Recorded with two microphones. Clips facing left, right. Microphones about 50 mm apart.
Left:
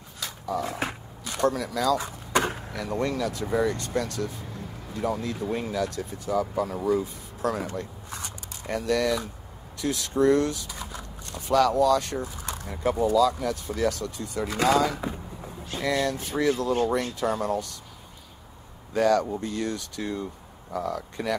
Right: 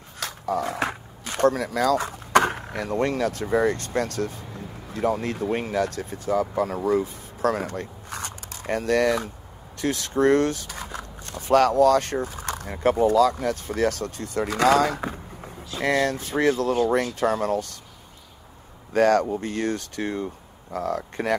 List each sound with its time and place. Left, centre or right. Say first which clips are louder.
0.2 s dog: right 4 dB; right
1.2 s a sound: right 4 dB; right
2.7 s speech: right 3 dB; right
15.8 s speech: right 4 dB; right
18.9 s speech: right 3 dB; right